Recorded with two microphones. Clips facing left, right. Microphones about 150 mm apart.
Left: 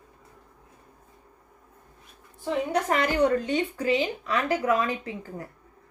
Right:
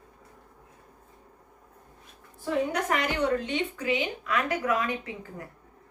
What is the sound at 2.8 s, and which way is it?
A woman's voice, 35° left (ahead or behind).